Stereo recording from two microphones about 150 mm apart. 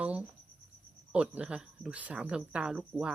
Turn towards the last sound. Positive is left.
turn(degrees=-5)  # may be behind; listen again after turning